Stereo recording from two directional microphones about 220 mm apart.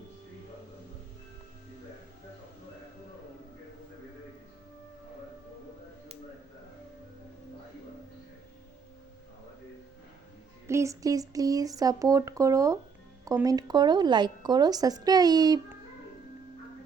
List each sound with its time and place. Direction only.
10.7 s speech: 15° right (ahead or behind)